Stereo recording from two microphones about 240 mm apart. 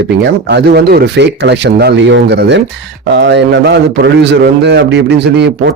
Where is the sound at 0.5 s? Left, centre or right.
Right.